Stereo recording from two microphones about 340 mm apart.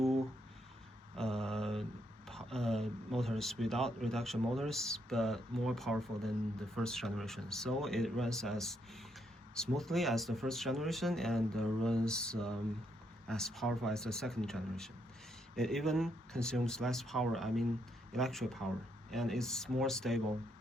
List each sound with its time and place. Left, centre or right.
1.1 s mantra: centre
2.2 s speech: centre